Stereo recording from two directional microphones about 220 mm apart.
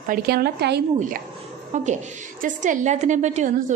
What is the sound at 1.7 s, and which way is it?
A woman's voice, 35° right (ahead or behind).